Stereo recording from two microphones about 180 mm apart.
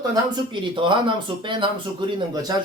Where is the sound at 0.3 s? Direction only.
25° right (ahead or behind).